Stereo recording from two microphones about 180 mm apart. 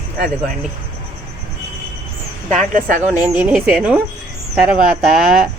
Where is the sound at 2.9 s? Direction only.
45° right (ahead or behind).